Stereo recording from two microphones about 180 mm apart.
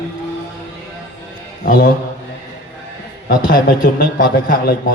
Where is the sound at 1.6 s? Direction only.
50° left (ahead or behind).